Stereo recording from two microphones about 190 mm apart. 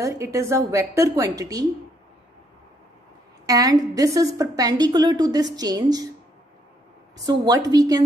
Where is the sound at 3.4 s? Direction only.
20° right (ahead or behind).